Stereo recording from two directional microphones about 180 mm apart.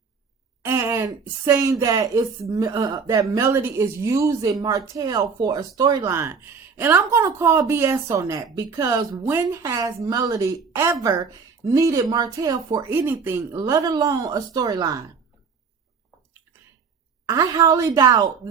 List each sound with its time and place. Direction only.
0.6 s a sound: 15° right (ahead or behind)
1.5 s a woman's voice: 15° right (ahead or behind)
17.2 s a woman's voice: 20° right (ahead or behind)